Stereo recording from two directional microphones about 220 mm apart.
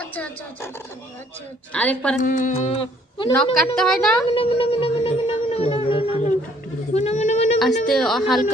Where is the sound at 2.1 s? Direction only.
35° left (ahead or behind).